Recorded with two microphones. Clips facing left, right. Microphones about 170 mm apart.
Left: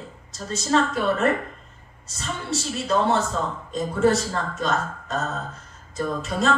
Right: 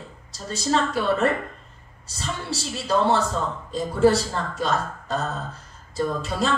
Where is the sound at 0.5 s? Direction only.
30° right (ahead or behind).